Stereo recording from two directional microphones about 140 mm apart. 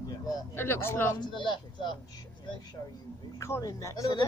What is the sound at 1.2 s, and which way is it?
Speech, 35° left (ahead or behind).